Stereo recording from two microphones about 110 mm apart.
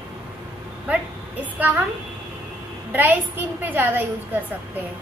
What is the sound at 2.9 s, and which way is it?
A woman's voice, 15° right (ahead or behind).